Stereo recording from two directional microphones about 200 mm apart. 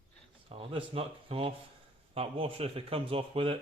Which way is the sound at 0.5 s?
25° right (ahead or behind).